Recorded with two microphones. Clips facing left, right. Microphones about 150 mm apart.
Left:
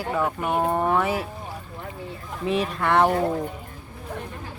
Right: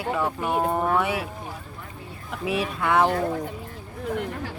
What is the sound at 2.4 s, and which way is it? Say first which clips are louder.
Speech: left 2 dB; 5° right (ahead or behind).